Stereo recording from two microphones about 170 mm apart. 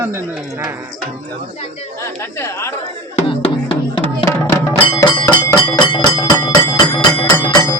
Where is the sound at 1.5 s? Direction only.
40° left (ahead or behind).